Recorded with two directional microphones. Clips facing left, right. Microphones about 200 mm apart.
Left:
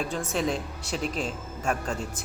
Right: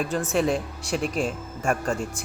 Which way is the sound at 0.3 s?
10° right (ahead or behind).